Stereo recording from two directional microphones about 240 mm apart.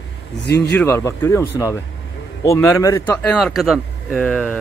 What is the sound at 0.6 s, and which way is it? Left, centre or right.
Speech, centre.